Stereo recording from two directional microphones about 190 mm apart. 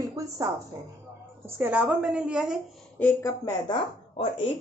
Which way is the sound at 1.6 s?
5° right (ahead or behind).